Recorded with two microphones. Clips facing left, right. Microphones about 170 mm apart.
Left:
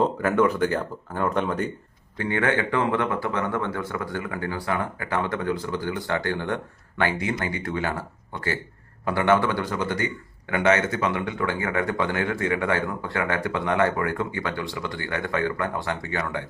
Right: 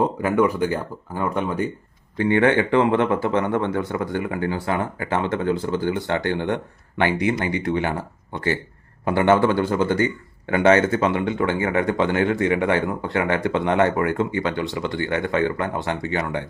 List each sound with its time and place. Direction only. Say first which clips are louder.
0.0 s speech: right 2 dB; 15° right (ahead or behind)
2.1 s a man's voice: right 6 dB; 25° right (ahead or behind)